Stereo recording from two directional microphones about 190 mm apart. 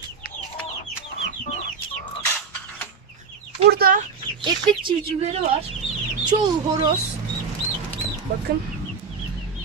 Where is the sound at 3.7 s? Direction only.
50° right (ahead or behind).